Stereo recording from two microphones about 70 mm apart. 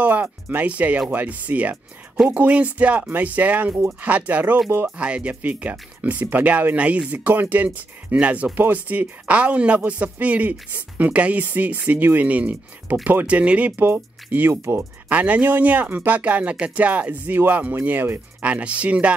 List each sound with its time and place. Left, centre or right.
0.0 s speech: right
4.6 s speech: right
4.9 s speech: centre
14.5 s speech: right
15.0 s speech: right
18.4 s speech: centre